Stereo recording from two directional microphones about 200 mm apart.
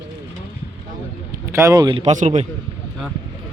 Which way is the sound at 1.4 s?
15° right (ahead or behind).